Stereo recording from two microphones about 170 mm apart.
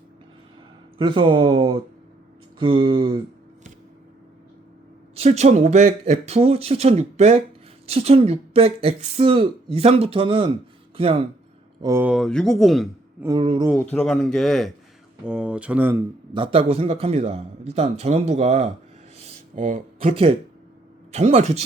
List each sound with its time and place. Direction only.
0.9 s speech: 30° right (ahead or behind)
5.1 s speech: 40° right (ahead or behind)
11.8 s speech: 20° right (ahead or behind)
12.0 s speech: centre (ahead or behind)
13.2 s speech: 25° right (ahead or behind)
13.9 s speech: 5° left (ahead or behind)
16.3 s speech: 30° right (ahead or behind)
19.2 s a sound: 50° right (ahead or behind)
20.1 s speech: 35° right (ahead or behind)